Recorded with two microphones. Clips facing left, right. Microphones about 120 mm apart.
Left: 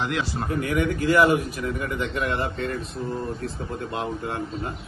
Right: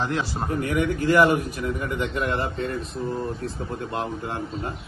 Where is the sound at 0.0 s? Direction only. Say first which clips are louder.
Right 1 dB; 35° right (ahead or behind).